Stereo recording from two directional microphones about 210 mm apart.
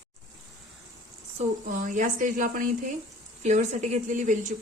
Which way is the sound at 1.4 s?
35° right (ahead or behind).